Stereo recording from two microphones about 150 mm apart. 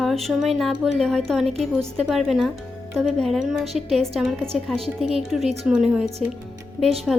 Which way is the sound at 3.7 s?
45° right (ahead or behind).